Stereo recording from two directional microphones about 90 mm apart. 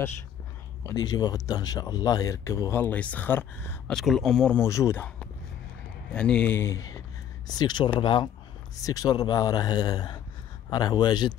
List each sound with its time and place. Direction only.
0.9 s speech: 45° left (ahead or behind)
2.7 s speech: 20° left (ahead or behind)
3.9 s speech: centre (ahead or behind)
4.6 s speech: 30° left (ahead or behind)
6.1 s speech: 10° left (ahead or behind)
6.5 s speech: 30° left (ahead or behind)
7.4 s speech: 50° left (ahead or behind)
8.0 s speech: 70° left (ahead or behind)
8.8 s speech: 45° left (ahead or behind)